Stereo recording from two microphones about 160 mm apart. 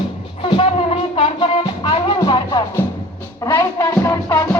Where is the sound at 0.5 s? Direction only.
40° left (ahead or behind).